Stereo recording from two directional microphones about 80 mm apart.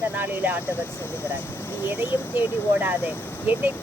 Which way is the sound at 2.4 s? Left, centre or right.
Right.